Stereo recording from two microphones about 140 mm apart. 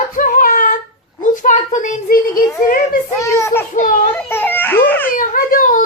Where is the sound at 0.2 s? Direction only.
70° left (ahead or behind); by 2.4 s 85° left.